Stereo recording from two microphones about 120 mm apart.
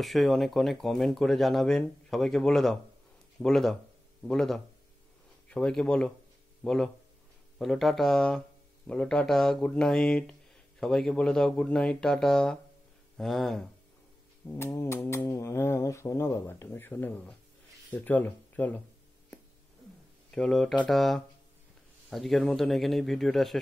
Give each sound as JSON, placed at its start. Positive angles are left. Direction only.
{"t": 0.0, "sound": "speech", "side_deg": 0}
{"t": 14.5, "sound": "speech", "side_deg": 20}
{"t": 20.2, "sound": "speech", "side_deg": 5}